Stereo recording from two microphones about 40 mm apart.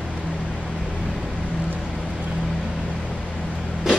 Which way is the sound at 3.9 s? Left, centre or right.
Centre.